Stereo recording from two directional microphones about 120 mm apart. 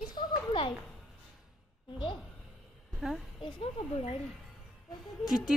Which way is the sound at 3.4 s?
55° left (ahead or behind).